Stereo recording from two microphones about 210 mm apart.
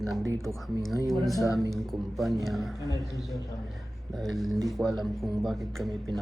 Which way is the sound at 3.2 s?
15° left (ahead or behind).